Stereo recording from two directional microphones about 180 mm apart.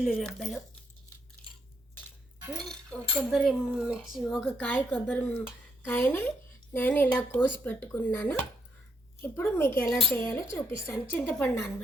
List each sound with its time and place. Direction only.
0.0 s cutlery: centre (ahead or behind)
2.6 s cutlery: centre (ahead or behind)
5.0 s speech: 5° left (ahead or behind)